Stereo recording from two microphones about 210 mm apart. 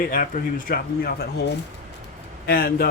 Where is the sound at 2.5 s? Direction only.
45° left (ahead or behind).